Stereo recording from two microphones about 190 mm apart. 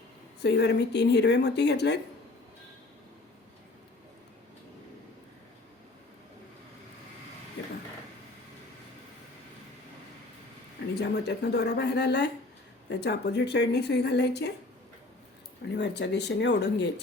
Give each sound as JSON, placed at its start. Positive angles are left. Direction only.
{"t": 0.4, "sound": "speech", "side_deg": 60}
{"t": 10.9, "sound": "speech", "side_deg": 60}
{"t": 15.7, "sound": "speech", "side_deg": 65}